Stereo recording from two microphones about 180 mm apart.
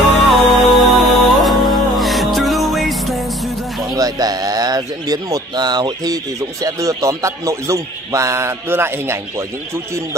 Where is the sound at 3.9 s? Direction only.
20° right (ahead or behind).